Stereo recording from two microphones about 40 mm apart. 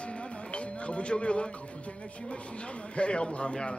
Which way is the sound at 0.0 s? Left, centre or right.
Left.